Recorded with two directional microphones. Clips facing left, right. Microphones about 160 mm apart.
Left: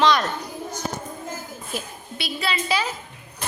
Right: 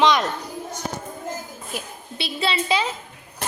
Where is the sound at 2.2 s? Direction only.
25° right (ahead or behind).